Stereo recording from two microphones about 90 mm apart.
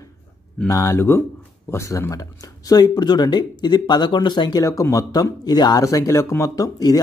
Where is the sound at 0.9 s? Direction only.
25° left (ahead or behind).